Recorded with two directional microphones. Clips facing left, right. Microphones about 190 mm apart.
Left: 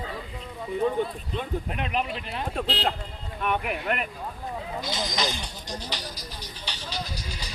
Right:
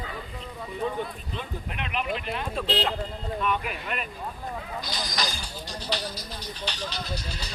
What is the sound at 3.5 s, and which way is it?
Speech, 60° left (ahead or behind).